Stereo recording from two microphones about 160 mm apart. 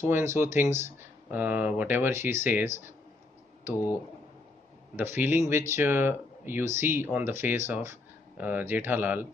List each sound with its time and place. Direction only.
0.0 s speech: 15° right (ahead or behind)
4.9 s speech: 15° right (ahead or behind)